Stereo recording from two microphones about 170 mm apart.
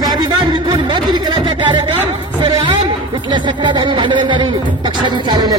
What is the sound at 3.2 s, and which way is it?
Speech, 25° right (ahead or behind).